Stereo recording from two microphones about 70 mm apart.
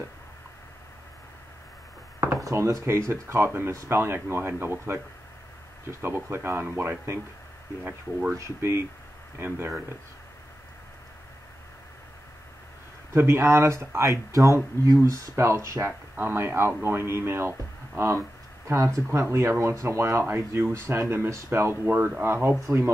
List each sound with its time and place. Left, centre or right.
2.1 s speech: right
13.1 s speech: right
16.2 s speech: right
19.3 s speech: right
20.2 s speech: right